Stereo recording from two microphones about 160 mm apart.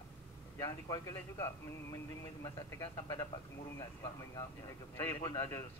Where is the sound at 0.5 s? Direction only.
20° left (ahead or behind).